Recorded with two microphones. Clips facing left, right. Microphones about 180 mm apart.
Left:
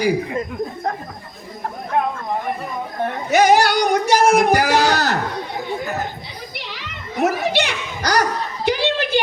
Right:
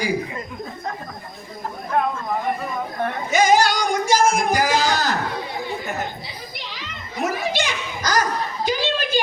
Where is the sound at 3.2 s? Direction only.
65° left (ahead or behind).